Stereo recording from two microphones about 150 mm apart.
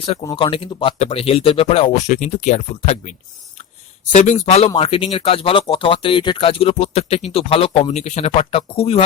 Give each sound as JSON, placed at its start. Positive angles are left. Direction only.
{"t": 0.0, "sound": "speech", "side_deg": 35}
{"t": 4.1, "sound": "speech", "side_deg": 55}